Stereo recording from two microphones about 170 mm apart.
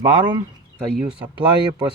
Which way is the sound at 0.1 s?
25° right (ahead or behind).